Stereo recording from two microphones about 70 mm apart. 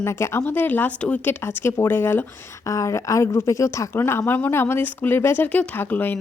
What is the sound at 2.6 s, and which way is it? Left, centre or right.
A woman's voice, left.